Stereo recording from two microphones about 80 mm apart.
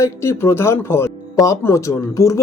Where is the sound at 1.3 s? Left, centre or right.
Left.